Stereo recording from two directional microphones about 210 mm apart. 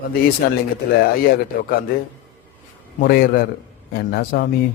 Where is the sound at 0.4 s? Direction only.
45° left (ahead or behind).